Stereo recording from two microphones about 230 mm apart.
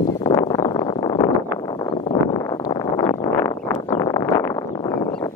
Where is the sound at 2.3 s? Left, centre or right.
Centre.